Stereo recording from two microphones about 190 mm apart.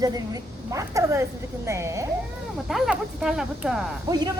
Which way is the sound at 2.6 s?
Centre (ahead or behind).